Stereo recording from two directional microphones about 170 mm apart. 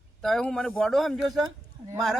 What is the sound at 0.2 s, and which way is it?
A man's voice, 5° left (ahead or behind).